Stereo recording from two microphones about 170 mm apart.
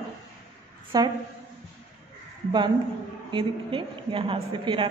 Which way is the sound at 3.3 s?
30° right (ahead or behind).